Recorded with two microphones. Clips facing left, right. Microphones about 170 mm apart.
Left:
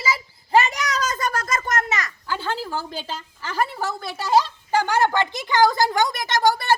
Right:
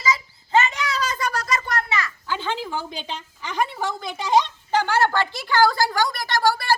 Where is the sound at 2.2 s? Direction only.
5° left (ahead or behind).